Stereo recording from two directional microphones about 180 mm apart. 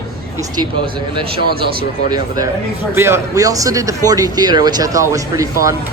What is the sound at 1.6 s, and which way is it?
Speech, 60° right (ahead or behind).